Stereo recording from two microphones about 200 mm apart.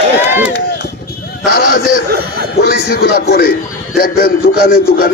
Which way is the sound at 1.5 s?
50° left (ahead or behind).